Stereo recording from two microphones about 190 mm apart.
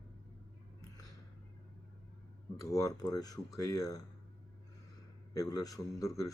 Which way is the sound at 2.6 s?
15° left (ahead or behind).